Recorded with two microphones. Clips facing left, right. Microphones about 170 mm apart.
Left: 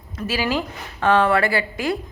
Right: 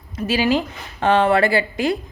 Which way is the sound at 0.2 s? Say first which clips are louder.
Right 4 dB; 20° right (ahead or behind).